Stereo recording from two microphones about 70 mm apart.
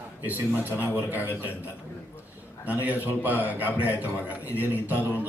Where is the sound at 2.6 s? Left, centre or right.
Right.